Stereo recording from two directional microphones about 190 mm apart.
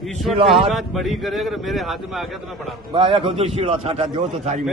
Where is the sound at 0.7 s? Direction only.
Centre (ahead or behind).